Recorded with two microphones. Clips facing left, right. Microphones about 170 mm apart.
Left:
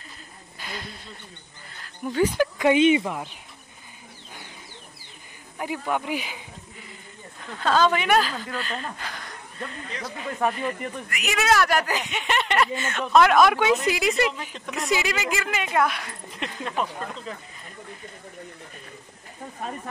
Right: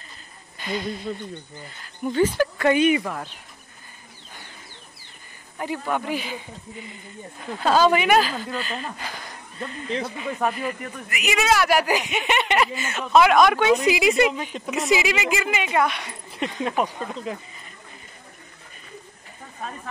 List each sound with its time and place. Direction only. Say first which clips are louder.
0.6 s a sound: right 9 dB; centre (ahead or behind)
2.1 s speech: right 1 dB; 10° left (ahead or behind)
5.6 s speech: right 1 dB; 10° left (ahead or behind)
7.5 s speech: right 3 dB; 10° right (ahead or behind)